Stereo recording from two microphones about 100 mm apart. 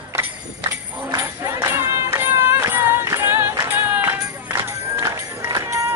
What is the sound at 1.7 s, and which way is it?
Clapping, 25° right (ahead or behind).